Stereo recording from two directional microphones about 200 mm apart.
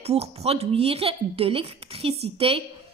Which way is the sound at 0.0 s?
30° right (ahead or behind).